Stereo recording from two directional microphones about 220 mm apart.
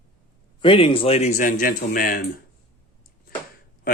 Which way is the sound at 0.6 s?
25° left (ahead or behind).